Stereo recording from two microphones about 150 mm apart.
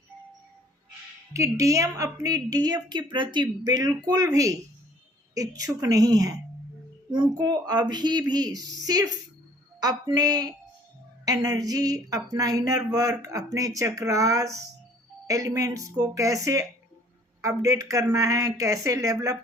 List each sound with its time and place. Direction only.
1.3 s speech: 20° right (ahead or behind)